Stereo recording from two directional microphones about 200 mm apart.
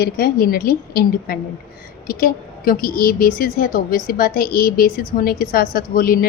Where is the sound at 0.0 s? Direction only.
50° left (ahead or behind).